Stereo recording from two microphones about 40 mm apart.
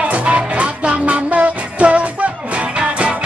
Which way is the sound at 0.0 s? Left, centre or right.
Right.